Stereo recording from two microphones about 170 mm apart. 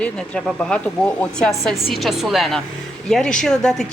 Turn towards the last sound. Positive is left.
turn(degrees=5)  # may be behind; listen again after turning